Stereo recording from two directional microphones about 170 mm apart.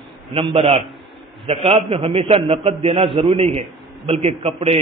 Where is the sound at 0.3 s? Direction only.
30° right (ahead or behind).